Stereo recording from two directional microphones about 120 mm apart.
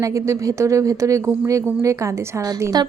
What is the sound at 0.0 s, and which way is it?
A woman's voice, 25° right (ahead or behind).